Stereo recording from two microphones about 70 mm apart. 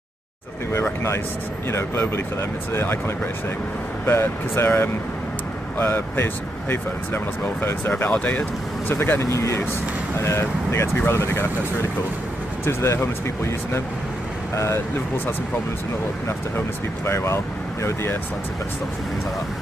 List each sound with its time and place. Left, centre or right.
1.7 s speech: left
4.0 s speech: left
8.1 s speech: left
9.2 s speech: left
14.5 s speech: left
16.3 s speech: left